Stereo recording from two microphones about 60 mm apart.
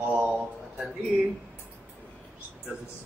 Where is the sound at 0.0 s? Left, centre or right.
Right.